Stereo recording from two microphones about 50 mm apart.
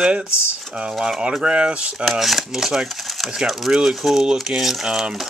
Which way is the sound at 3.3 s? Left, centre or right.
Centre.